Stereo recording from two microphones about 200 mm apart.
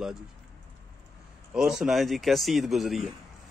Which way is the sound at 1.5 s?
5° right (ahead or behind).